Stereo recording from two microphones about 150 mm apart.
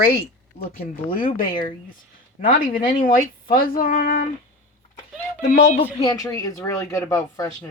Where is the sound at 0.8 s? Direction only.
75° left (ahead or behind).